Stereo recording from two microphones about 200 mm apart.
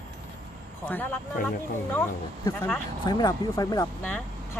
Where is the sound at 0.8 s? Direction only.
10° left (ahead or behind).